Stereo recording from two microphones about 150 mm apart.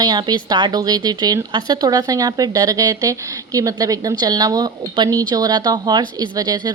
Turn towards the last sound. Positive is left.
turn(degrees=-25)  # may be behind; listen again after turning